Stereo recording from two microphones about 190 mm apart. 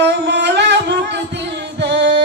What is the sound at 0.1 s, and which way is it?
Music, 65° right (ahead or behind).